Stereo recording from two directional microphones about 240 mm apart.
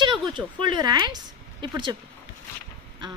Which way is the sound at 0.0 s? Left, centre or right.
Centre.